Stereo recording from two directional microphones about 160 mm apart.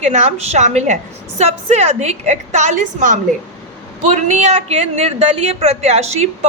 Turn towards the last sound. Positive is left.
turn(degrees=-45)  # may be behind; listen again after turning